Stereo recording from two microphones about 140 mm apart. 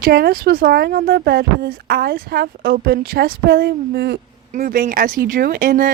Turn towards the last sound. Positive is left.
turn(degrees=-90)